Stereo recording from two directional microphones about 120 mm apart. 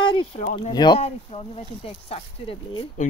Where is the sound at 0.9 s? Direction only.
55° left (ahead or behind).